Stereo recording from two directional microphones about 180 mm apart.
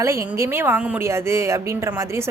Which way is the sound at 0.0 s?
15° right (ahead or behind).